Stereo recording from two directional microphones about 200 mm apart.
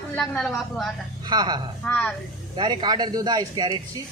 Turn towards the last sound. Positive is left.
turn(degrees=-20)  # may be behind; listen again after turning